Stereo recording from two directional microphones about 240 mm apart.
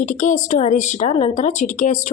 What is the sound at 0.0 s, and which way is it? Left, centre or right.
A woman's voice, left.